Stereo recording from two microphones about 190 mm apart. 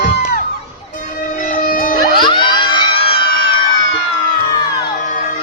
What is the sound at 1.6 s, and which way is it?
Music, 45° left (ahead or behind).